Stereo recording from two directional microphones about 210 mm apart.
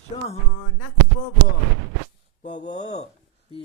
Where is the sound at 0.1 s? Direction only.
30° left (ahead or behind).